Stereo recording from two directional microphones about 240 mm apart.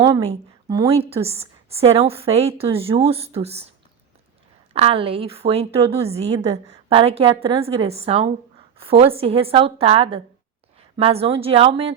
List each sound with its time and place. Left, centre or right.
0.0 s a woman's voice: right
4.7 s a woman's voice: right